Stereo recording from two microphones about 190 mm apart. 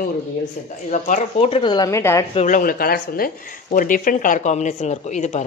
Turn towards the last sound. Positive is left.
turn(degrees=40)  # may be behind; listen again after turning